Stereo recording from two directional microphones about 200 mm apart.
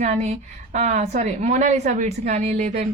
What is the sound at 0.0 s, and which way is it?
A woman's voice, 35° right (ahead or behind).